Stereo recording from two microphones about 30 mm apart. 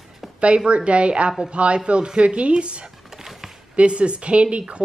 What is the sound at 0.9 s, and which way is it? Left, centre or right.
Speech, right.